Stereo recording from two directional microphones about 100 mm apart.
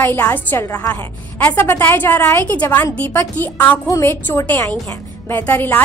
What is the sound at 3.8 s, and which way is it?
Speech, 30° left (ahead or behind).